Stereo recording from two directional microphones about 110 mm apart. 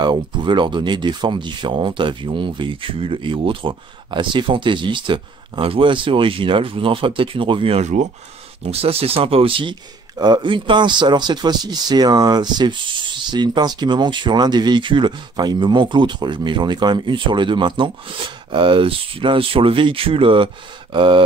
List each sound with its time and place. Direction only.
0.0 s speech: 45° right (ahead or behind); by 8.1 s 90° right
8.6 s speech: 65° right (ahead or behind)
10.1 s speech: 40° right (ahead or behind)